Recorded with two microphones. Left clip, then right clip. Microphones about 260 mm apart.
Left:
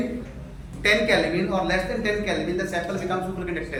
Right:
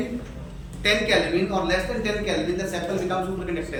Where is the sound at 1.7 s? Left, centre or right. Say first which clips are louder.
Even; centre.